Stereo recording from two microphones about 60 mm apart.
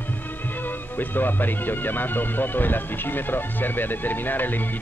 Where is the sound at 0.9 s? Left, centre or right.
Left.